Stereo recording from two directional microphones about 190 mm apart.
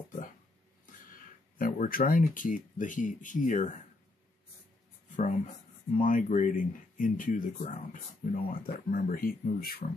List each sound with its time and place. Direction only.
1.6 s speech: 50° left (ahead or behind)
5.1 s speech: 45° left (ahead or behind)